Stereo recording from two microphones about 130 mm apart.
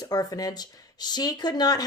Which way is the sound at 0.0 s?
30° left (ahead or behind).